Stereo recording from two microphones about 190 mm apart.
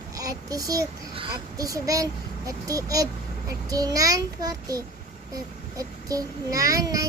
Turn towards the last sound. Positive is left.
turn(degrees=-20)  # may be behind; listen again after turning